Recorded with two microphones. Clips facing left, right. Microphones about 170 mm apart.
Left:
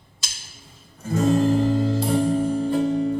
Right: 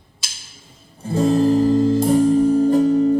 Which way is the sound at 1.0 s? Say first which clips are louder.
Right 3 dB; 30° right (ahead or behind).